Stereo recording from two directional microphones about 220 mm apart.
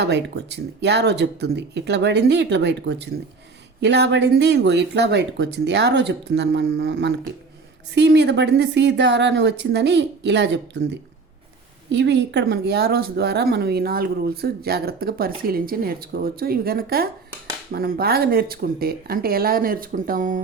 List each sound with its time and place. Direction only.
0.0 s speech: 50° right (ahead or behind)
11.9 s speech: 55° right (ahead or behind); by 20.4 s 35° right (ahead or behind)